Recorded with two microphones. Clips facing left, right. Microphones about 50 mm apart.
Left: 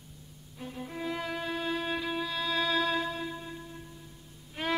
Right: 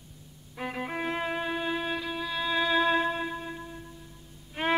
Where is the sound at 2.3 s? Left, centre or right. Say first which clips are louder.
Right 5 dB; centre.